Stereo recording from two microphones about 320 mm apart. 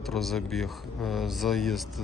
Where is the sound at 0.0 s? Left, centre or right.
Centre.